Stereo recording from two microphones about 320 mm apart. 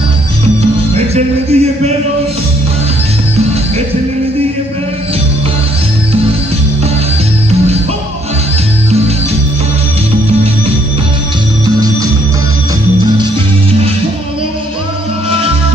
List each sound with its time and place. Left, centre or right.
0.9 s music: centre
11.6 s music: centre